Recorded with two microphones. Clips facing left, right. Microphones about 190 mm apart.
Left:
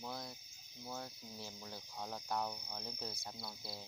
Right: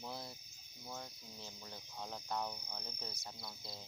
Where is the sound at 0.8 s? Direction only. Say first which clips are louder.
Left 2 dB; 5° left (ahead or behind).